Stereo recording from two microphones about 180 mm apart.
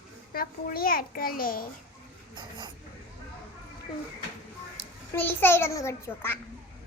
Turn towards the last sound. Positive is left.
turn(degrees=15)  # may be behind; listen again after turning